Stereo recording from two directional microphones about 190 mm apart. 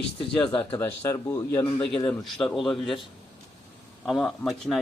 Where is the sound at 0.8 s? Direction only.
15° left (ahead or behind).